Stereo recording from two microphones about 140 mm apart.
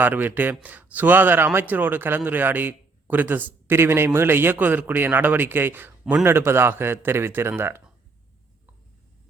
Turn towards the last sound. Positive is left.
turn(degrees=-15)  # may be behind; listen again after turning